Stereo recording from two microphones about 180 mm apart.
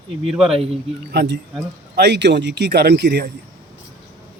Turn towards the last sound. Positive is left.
turn(degrees=-65)  # may be behind; listen again after turning